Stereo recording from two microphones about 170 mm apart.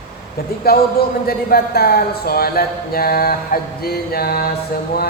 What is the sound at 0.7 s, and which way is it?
Speech, 65° left (ahead or behind).